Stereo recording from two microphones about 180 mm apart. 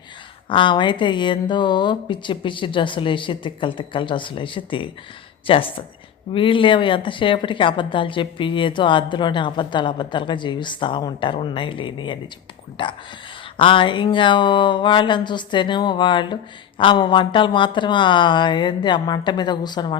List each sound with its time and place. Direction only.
0.4 s speech: 30° left (ahead or behind)